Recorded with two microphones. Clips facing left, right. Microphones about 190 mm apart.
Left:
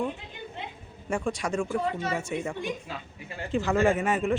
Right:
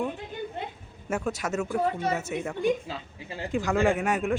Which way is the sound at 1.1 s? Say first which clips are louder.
Even; 5° right (ahead or behind).